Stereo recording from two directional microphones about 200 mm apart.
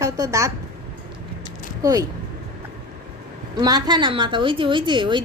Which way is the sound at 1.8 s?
20° right (ahead or behind).